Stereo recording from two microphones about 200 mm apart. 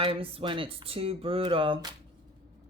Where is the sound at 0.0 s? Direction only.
25° right (ahead or behind).